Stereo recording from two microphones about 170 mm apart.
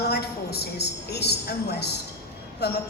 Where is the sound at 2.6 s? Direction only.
75° left (ahead or behind).